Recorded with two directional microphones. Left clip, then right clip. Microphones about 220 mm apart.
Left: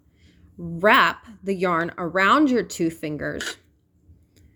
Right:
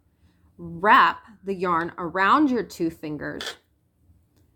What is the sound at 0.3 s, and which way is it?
A woman's voice, 25° left (ahead or behind).